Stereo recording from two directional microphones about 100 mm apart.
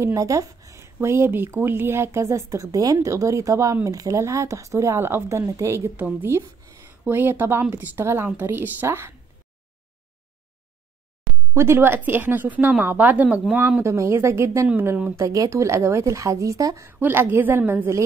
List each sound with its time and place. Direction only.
0.0 s a sound: 30° right (ahead or behind)
1.0 s speech: 25° right (ahead or behind)
5.9 s speech: 15° right (ahead or behind)
11.5 s speech: 25° right (ahead or behind)
13.8 s speech: 30° right (ahead or behind)
17.0 s speech: 20° right (ahead or behind)